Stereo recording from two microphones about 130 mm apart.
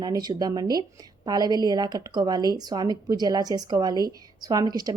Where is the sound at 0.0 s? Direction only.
30° right (ahead or behind).